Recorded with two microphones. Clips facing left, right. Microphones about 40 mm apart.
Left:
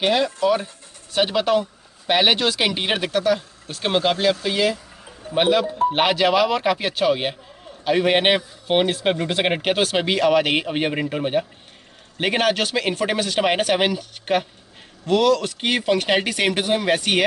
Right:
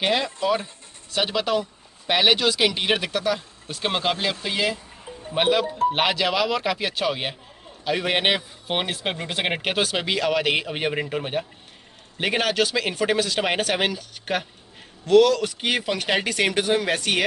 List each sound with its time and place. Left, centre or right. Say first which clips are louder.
0.0 s speech: left 4 dB; centre
5.3 s speech: left 3 dB; centre